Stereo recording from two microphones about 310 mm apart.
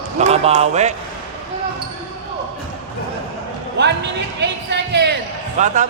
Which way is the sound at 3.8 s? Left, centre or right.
Right.